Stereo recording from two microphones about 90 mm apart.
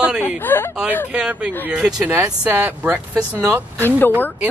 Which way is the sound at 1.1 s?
10° right (ahead or behind).